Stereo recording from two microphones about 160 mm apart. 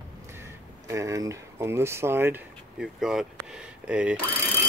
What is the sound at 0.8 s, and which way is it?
Speech, 20° right (ahead or behind).